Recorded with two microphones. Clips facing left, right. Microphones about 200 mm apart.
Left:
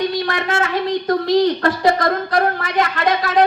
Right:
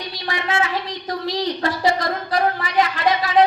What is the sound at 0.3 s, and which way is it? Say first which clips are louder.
A woman's voice: left 2 dB; 50° left (ahead or behind).